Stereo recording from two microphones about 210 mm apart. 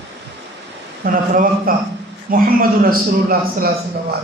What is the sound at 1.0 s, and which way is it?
A man's voice, 40° right (ahead or behind).